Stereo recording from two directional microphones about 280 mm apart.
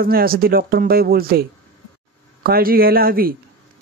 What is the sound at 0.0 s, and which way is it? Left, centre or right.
Speech, right.